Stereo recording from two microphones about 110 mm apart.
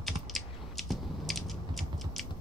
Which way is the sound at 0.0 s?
Centre (ahead or behind).